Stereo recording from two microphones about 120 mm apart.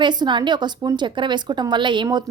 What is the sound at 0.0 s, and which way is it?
A woman's voice, 40° right (ahead or behind).